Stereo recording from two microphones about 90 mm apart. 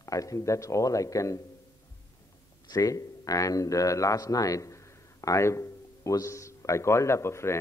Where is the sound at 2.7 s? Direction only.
40° left (ahead or behind).